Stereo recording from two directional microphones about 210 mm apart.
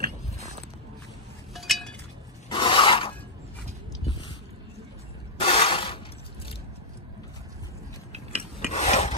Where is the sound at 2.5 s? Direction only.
25° left (ahead or behind).